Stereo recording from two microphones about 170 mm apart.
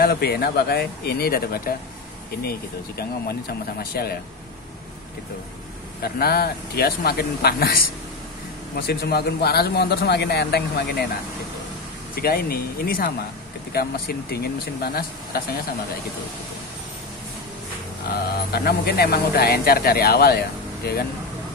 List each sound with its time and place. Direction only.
0.0 s speech: 65° left (ahead or behind)
6.0 s speech: 65° left (ahead or behind)
12.2 s speech: 65° left (ahead or behind)
18.1 s speech: 70° left (ahead or behind)